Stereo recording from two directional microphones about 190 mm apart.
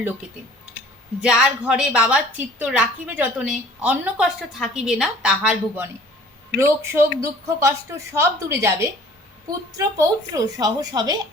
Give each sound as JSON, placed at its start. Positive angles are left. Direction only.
{"t": 1.2, "sound": "a woman's voice", "side_deg": -5}